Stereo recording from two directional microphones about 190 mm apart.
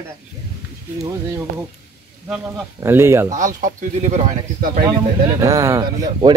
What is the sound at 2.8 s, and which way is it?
Speech, 15° right (ahead or behind).